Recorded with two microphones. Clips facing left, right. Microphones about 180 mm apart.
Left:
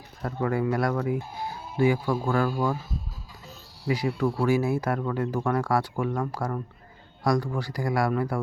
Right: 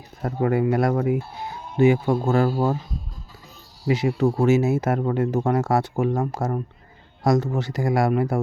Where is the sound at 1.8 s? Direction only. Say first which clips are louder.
Right 5 dB; 25° right (ahead or behind).